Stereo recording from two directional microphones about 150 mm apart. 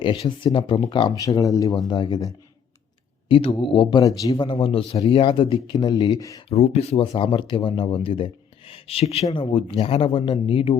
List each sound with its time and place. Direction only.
0.0 s speech: 35° left (ahead or behind)
6.5 s speech: 45° left (ahead or behind)